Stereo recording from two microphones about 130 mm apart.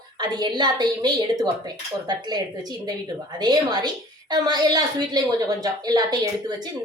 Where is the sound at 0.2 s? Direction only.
35° right (ahead or behind).